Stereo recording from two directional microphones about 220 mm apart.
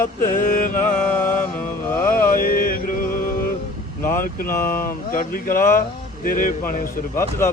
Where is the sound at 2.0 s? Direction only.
40° left (ahead or behind).